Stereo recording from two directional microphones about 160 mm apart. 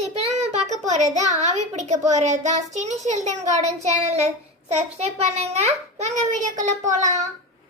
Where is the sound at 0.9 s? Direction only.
45° right (ahead or behind).